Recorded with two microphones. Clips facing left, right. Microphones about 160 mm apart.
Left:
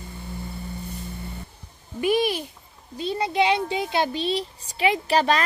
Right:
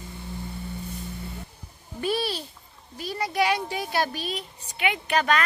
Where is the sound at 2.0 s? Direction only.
15° left (ahead or behind).